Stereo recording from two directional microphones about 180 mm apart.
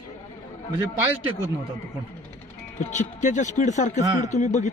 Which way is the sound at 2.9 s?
45° left (ahead or behind).